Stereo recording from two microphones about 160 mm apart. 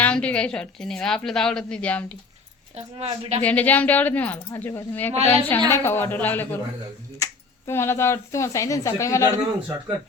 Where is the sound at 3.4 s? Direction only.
10° left (ahead or behind).